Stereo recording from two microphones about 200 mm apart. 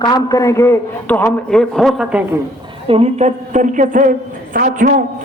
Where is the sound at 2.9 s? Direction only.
30° right (ahead or behind).